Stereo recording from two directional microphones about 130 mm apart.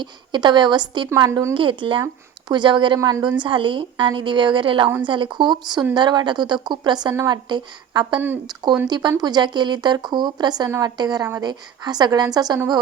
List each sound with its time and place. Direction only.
0.0 s a woman's voice: 35° right (ahead or behind)
1.1 s a woman's voice: 25° right (ahead or behind)
1.5 s a woman's voice: 40° right (ahead or behind)
7.1 s a woman's voice: 25° right (ahead or behind)
7.4 s a woman's voice: 35° right (ahead or behind)